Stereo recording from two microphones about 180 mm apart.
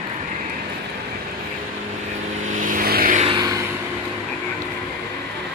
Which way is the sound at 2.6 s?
50° right (ahead or behind).